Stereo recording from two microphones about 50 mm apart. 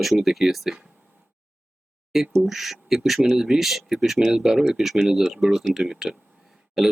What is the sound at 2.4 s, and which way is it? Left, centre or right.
Speech, centre.